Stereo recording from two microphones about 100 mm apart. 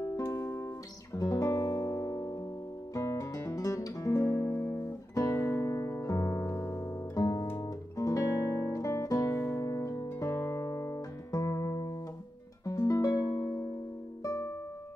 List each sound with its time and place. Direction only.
0.0 s music: 35° left (ahead or behind)
2.9 s guitar: 35° left (ahead or behind)
12.6 s music: 35° left (ahead or behind)